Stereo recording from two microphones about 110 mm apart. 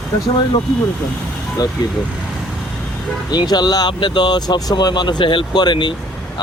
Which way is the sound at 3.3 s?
40° left (ahead or behind).